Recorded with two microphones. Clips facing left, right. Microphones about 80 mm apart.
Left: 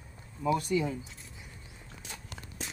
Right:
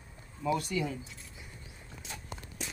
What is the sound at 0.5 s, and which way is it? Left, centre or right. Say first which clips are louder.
Speech: left 3 dB; left.